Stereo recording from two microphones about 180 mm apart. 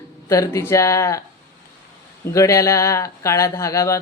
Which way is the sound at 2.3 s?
15° left (ahead or behind).